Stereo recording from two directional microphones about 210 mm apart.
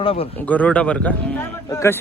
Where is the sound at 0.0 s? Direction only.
25° left (ahead or behind).